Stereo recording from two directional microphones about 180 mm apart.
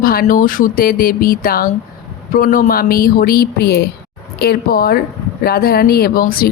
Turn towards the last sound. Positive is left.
turn(degrees=55)  # may be behind; listen again after turning